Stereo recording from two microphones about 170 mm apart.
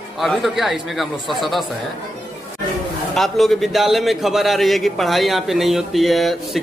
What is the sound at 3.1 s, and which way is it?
A man's voice, centre (ahead or behind).